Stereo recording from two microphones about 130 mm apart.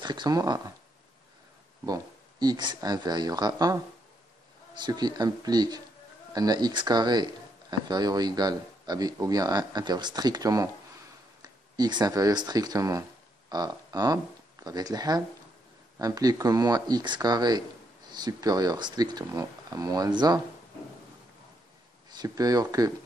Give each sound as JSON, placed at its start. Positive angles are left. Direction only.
{"t": 0.0, "sound": "speech", "side_deg": -35}
{"t": 1.9, "sound": "speech", "side_deg": -30}
{"t": 22.1, "sound": "speech", "side_deg": -30}